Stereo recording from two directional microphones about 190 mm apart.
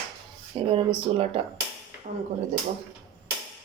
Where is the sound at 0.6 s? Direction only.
30° right (ahead or behind).